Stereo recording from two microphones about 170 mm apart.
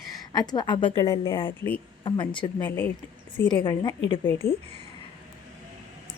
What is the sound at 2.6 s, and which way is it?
Speech, 10° left (ahead or behind).